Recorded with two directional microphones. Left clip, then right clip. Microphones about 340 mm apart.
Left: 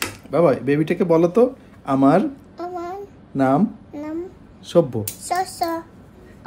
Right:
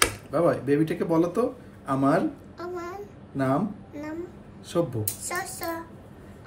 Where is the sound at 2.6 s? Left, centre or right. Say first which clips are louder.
Left 6 dB; centre.